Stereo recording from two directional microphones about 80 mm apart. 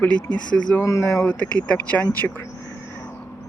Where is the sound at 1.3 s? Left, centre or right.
Centre.